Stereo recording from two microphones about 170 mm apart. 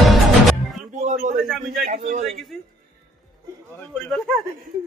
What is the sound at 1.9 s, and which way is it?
Speech, 45° right (ahead or behind).